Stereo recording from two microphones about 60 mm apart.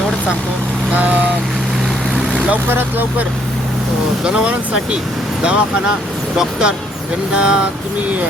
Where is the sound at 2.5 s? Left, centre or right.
Right.